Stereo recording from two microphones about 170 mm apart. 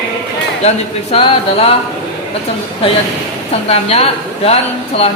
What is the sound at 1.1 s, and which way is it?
Speech, 35° left (ahead or behind).